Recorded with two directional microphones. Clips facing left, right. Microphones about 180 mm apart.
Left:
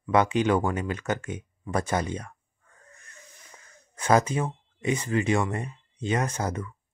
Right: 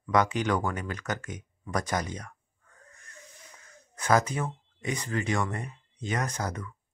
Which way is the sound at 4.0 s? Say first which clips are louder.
Left 3 dB; 25° left (ahead or behind).